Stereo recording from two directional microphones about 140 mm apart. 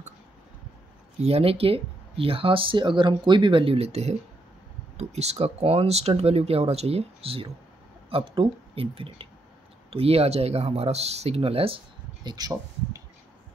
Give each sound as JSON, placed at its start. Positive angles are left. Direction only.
{"t": 1.2, "sound": "speech", "side_deg": -45}